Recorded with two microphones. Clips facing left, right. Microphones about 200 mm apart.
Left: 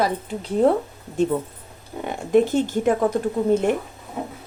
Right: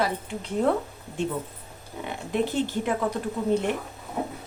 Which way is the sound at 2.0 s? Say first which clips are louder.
Left 9 dB; 45° left (ahead or behind).